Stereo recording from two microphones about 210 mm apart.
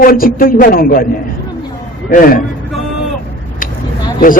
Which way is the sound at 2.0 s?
45° left (ahead or behind).